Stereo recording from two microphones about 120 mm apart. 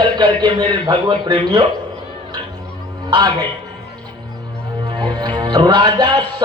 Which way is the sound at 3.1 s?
35° right (ahead or behind).